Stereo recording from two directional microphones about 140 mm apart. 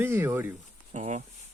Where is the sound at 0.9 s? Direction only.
55° right (ahead or behind).